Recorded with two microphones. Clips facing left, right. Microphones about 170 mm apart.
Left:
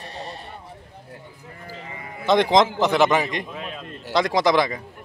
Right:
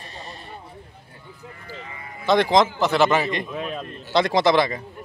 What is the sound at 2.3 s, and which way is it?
Speech, 20° left (ahead or behind).